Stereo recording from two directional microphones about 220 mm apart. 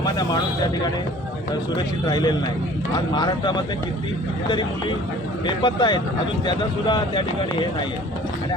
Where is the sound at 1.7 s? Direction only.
20° left (ahead or behind).